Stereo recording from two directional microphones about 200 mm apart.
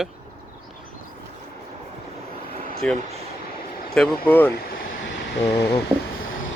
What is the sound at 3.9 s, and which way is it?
Speech, centre (ahead or behind).